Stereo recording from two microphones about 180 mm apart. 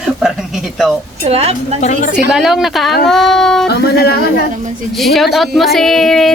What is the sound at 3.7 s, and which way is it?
Speech, 65° left (ahead or behind).